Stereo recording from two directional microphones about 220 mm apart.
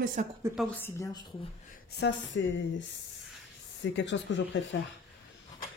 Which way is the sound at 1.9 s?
50° left (ahead or behind).